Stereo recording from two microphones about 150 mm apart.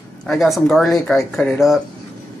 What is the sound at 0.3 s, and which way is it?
Speech, centre (ahead or behind).